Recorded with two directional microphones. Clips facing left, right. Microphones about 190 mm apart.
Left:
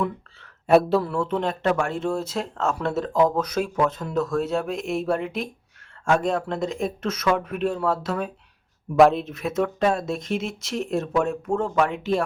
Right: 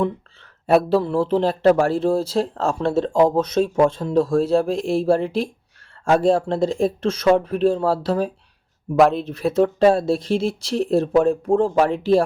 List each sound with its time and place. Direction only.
0.7 s speech: centre (ahead or behind)
1.0 s speech: 30° right (ahead or behind)
9.0 s speech: centre (ahead or behind)
9.2 s speech: 30° right (ahead or behind)